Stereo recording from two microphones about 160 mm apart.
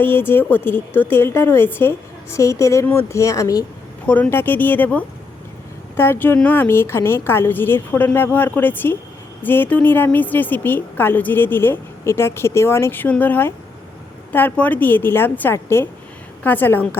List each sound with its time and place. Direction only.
0.0 s a woman's voice: 15° left (ahead or behind)
4.0 s a woman's voice: 10° left (ahead or behind)